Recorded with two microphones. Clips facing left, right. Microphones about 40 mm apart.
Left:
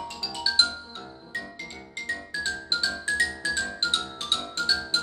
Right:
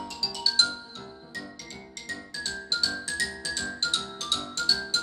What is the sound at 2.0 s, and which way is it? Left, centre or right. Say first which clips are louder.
Music: left 5 dB; left.